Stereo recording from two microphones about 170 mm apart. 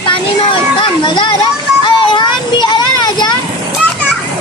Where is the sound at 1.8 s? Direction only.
25° left (ahead or behind).